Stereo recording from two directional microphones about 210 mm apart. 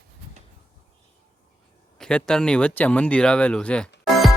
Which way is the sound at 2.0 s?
5° left (ahead or behind).